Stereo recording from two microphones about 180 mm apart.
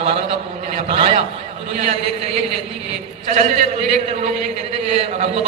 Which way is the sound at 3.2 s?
45° right (ahead or behind).